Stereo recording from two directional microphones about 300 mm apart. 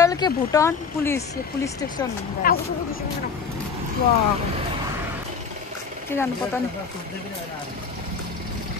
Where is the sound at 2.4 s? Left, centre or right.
Left.